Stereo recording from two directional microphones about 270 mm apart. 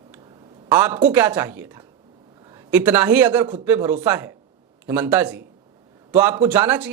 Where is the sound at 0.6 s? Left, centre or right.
Centre.